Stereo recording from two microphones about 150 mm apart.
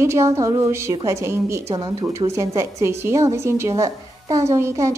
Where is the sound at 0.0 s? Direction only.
20° right (ahead or behind).